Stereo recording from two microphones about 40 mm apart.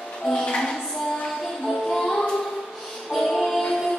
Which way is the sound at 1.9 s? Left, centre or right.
Centre.